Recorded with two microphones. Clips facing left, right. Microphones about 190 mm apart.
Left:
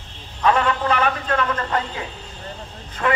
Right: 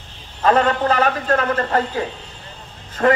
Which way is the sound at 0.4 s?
40° right (ahead or behind).